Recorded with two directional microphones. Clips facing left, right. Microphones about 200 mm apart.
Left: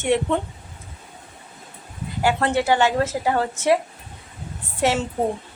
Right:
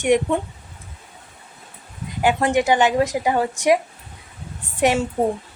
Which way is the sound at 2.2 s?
15° right (ahead or behind).